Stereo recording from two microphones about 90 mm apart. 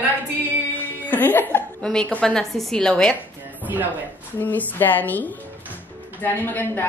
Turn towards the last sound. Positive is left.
turn(degrees=20)  # may be behind; listen again after turning